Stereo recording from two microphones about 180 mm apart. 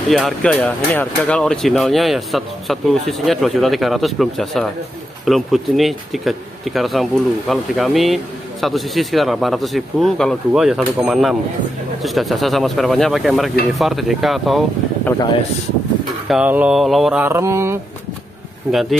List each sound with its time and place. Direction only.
0.1 s speech: 5° left (ahead or behind)
15.0 s speech: 20° left (ahead or behind)
16.3 s mantra: 5° right (ahead or behind)
18.7 s speech: centre (ahead or behind)